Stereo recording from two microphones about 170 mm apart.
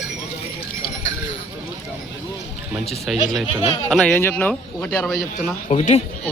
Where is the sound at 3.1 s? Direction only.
Centre (ahead or behind).